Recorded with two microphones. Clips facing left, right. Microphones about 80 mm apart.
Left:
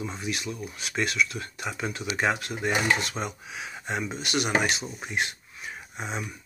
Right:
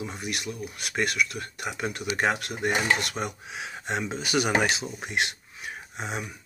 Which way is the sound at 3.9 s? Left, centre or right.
Right.